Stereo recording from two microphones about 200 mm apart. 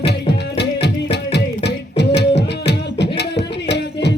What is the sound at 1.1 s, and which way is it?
Music, 55° left (ahead or behind).